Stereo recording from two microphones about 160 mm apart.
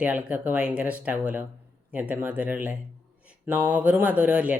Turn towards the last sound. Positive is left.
turn(degrees=-10)  # may be behind; listen again after turning